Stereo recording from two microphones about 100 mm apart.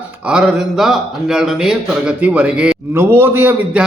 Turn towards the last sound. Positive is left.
turn(degrees=-20)  # may be behind; listen again after turning